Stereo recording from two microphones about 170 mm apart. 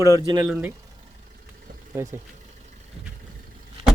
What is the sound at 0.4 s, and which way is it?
Speech, centre (ahead or behind).